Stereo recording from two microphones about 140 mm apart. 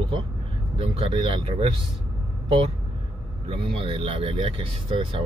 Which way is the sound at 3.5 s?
40° right (ahead or behind).